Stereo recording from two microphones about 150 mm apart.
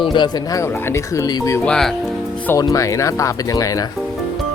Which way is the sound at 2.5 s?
20° left (ahead or behind).